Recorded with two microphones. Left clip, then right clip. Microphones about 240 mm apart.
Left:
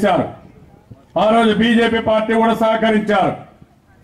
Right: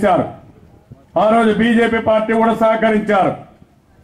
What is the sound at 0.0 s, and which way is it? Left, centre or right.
A man's voice, centre.